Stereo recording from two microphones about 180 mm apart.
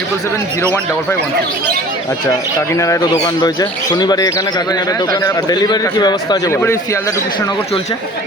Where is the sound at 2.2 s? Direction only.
15° left (ahead or behind).